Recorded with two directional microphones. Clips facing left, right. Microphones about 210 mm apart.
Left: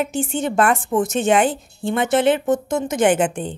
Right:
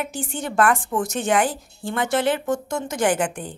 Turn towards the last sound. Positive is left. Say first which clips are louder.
# left 5 dB
turn(degrees=25)  # may be behind; listen again after turning